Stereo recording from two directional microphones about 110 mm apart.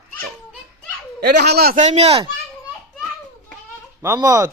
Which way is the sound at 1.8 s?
85° right.